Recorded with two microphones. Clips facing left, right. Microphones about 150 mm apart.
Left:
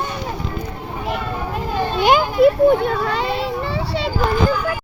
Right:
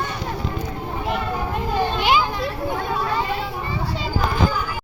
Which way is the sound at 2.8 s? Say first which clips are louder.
Left 3 dB; 70° left (ahead or behind).